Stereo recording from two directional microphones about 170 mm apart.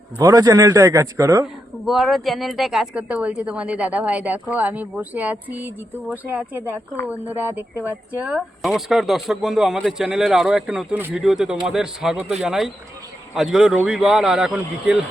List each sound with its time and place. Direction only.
0.2 s a man's voice: 20° right (ahead or behind)
1.8 s a woman's voice: centre (ahead or behind)